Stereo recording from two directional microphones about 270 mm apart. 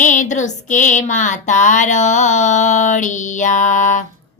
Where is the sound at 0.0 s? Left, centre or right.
Left.